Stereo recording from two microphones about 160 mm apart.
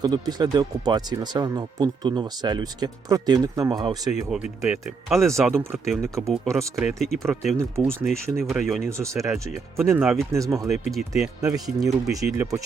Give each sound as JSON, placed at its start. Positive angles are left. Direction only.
{"t": 0.0, "sound": "speech", "side_deg": -25}
{"t": 4.3, "sound": "speech", "side_deg": -10}
{"t": 7.6, "sound": "speech", "side_deg": -15}
{"t": 8.0, "sound": "speech", "side_deg": 0}
{"t": 8.9, "sound": "speech", "side_deg": -20}
{"t": 9.3, "sound": "speech", "side_deg": 0}
{"t": 10.3, "sound": "speech", "side_deg": -20}
{"t": 10.7, "sound": "speech", "side_deg": 0}
{"t": 12.4, "sound": "speech", "side_deg": -20}